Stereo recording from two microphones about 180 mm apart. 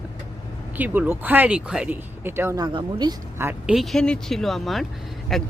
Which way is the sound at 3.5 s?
5° right (ahead or behind).